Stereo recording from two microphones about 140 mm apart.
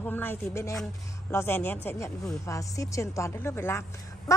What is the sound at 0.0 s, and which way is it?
A woman's voice, 15° left (ahead or behind).